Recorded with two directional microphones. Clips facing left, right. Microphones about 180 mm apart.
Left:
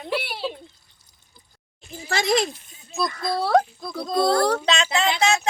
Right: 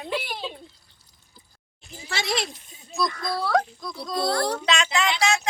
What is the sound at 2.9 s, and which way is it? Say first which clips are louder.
Speech: left 2 dB; 25° left (ahead or behind).